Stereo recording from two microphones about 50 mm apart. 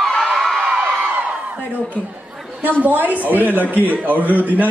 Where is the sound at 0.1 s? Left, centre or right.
Centre.